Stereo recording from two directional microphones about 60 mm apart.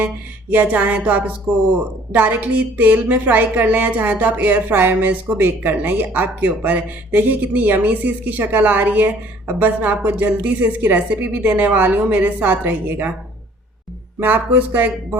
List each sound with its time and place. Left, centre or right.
0.5 s a woman's voice: right
14.2 s a woman's voice: right